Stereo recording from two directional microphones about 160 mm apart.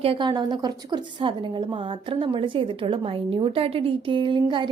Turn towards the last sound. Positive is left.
turn(degrees=-30)  # may be behind; listen again after turning